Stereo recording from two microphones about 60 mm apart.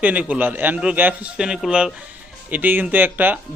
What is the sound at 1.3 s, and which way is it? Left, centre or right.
Speech, centre.